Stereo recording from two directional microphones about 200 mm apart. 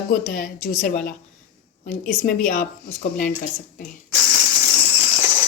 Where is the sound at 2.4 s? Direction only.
40° left (ahead or behind).